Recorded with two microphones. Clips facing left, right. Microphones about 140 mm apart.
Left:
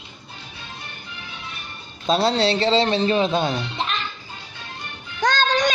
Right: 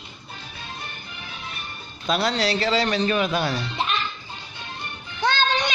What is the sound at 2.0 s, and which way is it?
Speech, 30° left (ahead or behind).